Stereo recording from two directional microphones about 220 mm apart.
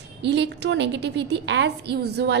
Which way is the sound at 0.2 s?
50° right (ahead or behind).